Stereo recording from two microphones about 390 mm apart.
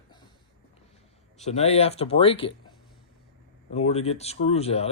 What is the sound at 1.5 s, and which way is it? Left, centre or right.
Speech, centre.